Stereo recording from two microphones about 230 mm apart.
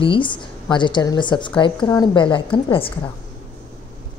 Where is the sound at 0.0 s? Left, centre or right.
Left.